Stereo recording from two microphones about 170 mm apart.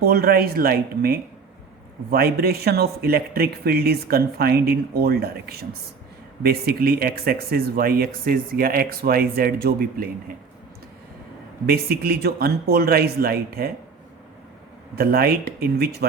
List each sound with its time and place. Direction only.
0.0 s speech: 65° right (ahead or behind)
11.6 s speech: 65° right (ahead or behind)
14.9 s speech: 65° right (ahead or behind)